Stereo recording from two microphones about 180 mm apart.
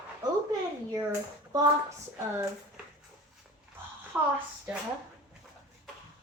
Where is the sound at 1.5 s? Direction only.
20° right (ahead or behind).